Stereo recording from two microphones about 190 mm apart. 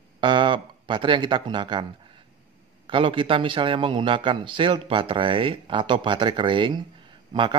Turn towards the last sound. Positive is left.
turn(degrees=-25)  # may be behind; listen again after turning